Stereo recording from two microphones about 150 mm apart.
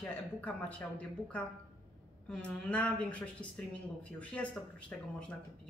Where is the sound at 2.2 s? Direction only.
5° left (ahead or behind).